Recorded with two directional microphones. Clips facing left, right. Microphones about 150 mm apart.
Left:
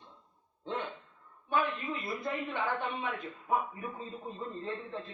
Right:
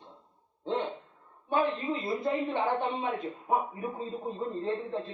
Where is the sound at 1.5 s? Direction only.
30° right (ahead or behind).